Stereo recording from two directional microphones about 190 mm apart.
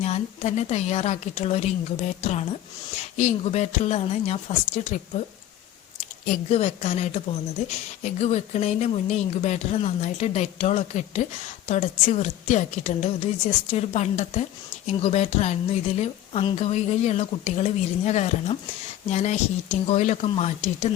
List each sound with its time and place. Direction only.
0.0 s a woman's voice: 35° left (ahead or behind)
6.2 s a woman's voice: 35° left (ahead or behind)